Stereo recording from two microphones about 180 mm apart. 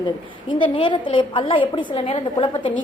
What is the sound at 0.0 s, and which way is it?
A woman's voice, 25° left (ahead or behind).